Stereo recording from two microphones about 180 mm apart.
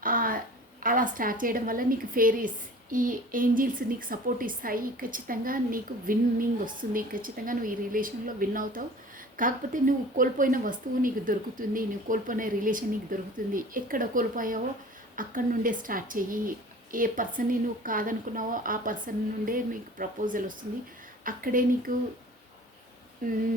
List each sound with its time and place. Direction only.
0.0 s a sound: 50° right (ahead or behind)
2.9 s speech: 50° right (ahead or behind)
23.2 s speech: 50° right (ahead or behind)